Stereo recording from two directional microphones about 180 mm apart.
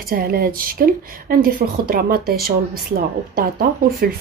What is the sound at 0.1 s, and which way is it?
Speech, 55° right (ahead or behind).